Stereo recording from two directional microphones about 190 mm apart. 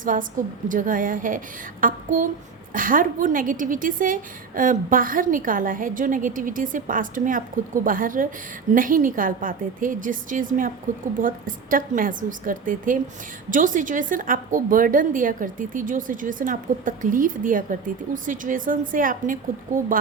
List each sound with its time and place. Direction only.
0.0 s a woman's voice: 45° right (ahead or behind)